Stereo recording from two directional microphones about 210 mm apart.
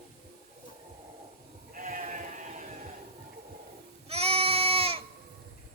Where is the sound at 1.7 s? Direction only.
40° right (ahead or behind).